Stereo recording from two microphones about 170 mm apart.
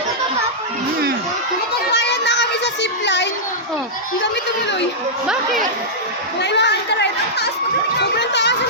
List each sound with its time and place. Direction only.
1.9 s child singing: 90° left
6.4 s speech: 90° left